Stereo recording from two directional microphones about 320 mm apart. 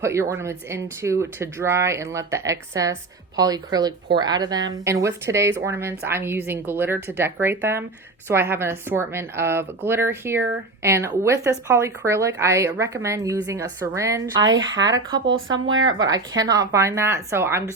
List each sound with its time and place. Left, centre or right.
0.0 s speech: centre
14.4 s speech: right
15.4 s speech: centre